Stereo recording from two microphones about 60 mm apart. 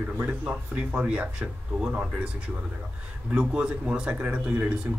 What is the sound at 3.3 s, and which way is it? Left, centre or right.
Speech, centre.